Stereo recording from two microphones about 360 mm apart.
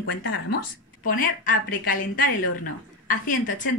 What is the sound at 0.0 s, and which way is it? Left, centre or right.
A woman's voice, left.